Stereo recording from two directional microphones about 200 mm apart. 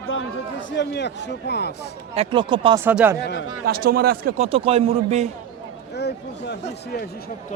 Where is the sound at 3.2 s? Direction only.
70° left (ahead or behind).